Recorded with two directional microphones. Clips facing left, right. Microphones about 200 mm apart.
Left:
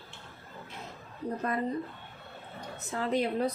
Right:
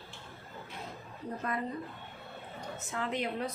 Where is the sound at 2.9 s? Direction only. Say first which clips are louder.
Left 6 dB; 35° left (ahead or behind).